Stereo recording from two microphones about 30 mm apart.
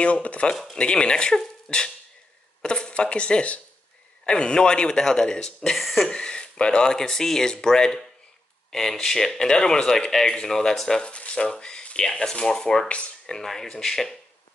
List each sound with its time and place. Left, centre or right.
0.0 s speech: left
0.7 s speech: left
1.7 s speech: left
2.9 s speech: left
5.8 s cough: centre
6.0 s speech: left
6.9 s speech: centre
11.0 s speech: left
11.3 s speech: left
12.8 s speech: left
13.4 s speech: centre